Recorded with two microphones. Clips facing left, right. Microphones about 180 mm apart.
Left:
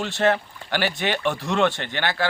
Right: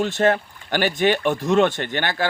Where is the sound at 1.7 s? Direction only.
50° right (ahead or behind).